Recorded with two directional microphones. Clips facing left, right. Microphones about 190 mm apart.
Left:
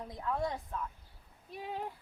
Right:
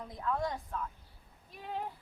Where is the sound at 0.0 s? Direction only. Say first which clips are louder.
Even; 25° left (ahead or behind).